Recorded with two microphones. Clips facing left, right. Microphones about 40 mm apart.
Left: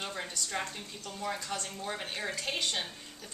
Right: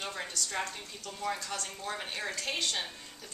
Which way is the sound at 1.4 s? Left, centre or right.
Centre.